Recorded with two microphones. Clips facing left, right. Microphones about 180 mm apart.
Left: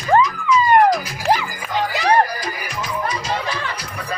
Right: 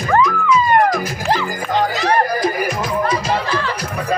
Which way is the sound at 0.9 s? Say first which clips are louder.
Even; 50° right (ahead or behind).